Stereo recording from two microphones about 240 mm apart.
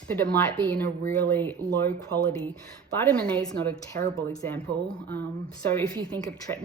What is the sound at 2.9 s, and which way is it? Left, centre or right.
A woman's voice, centre.